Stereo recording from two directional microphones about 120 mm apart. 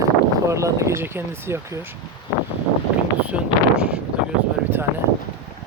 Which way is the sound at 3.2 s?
10° right (ahead or behind).